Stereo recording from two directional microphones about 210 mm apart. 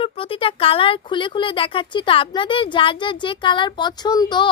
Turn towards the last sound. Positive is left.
turn(degrees=20)  # may be behind; listen again after turning